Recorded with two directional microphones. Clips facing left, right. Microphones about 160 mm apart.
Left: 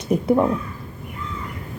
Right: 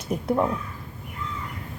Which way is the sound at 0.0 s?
Centre (ahead or behind).